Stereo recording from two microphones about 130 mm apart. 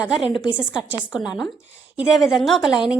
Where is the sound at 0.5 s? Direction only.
10° right (ahead or behind).